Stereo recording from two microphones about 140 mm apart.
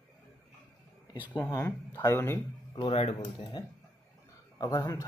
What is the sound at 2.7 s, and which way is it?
Speech, 40° left (ahead or behind).